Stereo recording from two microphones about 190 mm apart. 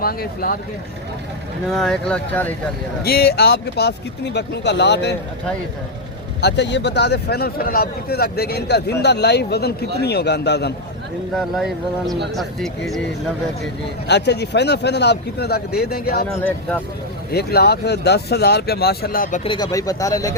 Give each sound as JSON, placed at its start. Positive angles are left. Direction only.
{"t": 0.0, "sound": "speech", "side_deg": 50}
{"t": 1.6, "sound": "speech", "side_deg": 0}
{"t": 3.0, "sound": "a man's voice", "side_deg": 55}
{"t": 6.4, "sound": "a man's voice", "side_deg": 65}
{"t": 11.3, "sound": "speech", "side_deg": 0}
{"t": 14.1, "sound": "a man's voice", "side_deg": 65}
{"t": 16.3, "sound": "speech", "side_deg": 5}
{"t": 17.3, "sound": "a man's voice", "side_deg": 55}
{"t": 19.5, "sound": "speech", "side_deg": 20}